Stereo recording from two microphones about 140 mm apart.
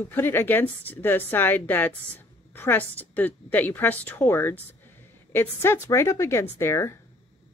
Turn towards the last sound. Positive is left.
turn(degrees=20)  # may be behind; listen again after turning